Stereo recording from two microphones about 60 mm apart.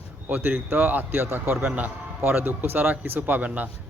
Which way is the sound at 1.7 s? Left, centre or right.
Right.